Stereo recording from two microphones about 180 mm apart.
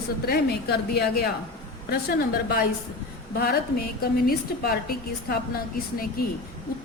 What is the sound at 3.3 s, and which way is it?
A woman's voice, 55° left (ahead or behind).